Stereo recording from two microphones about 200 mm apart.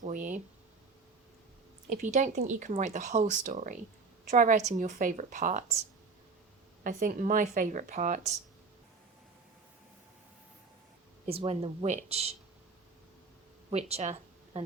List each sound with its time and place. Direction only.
0.0 s speech: 40° right (ahead or behind)
1.9 s speech: 40° right (ahead or behind)
6.8 s speech: 40° right (ahead or behind)
11.3 s speech: 30° right (ahead or behind)
13.7 s a sound: 30° right (ahead or behind)